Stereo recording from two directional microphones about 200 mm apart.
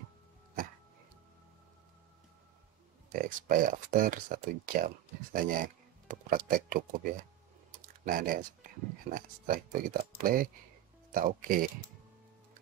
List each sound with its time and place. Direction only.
3.1 s speech: 45° right (ahead or behind)
7.7 s a sound: 45° right (ahead or behind)
9.1 s speech: 45° right (ahead or behind)